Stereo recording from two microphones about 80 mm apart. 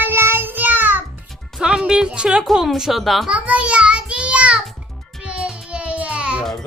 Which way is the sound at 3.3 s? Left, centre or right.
Centre.